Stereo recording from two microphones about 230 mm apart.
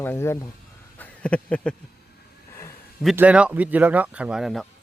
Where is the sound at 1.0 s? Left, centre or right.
Centre.